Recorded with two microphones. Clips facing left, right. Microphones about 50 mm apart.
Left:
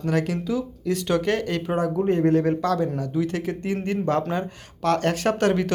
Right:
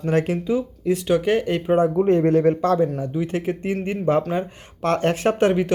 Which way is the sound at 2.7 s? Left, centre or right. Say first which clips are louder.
Right 2 dB; centre.